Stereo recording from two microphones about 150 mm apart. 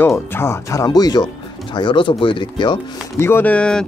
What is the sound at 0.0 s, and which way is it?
Speech, 15° left (ahead or behind).